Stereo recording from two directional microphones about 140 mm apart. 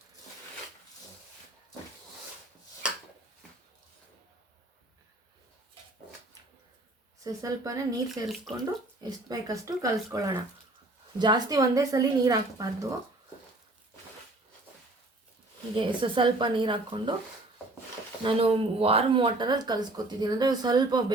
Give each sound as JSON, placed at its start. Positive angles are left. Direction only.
{"t": 7.3, "sound": "speech", "side_deg": -25}
{"t": 15.7, "sound": "speech", "side_deg": -35}
{"t": 18.2, "sound": "speech", "side_deg": -40}